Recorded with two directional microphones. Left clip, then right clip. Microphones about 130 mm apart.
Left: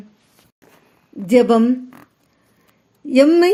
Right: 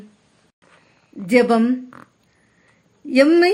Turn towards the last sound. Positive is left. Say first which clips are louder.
# left 2 dB
turn(degrees=30)  # may be behind; listen again after turning